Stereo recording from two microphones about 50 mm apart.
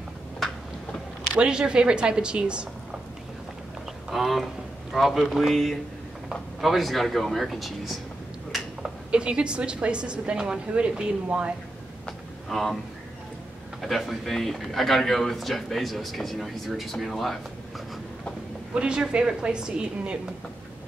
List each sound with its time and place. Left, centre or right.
1.3 s a woman's voice: centre
4.1 s a man's voice: centre
9.1 s a woman's voice: right
12.4 s speech: centre
13.7 s a man's voice: centre
18.8 s a woman's voice: centre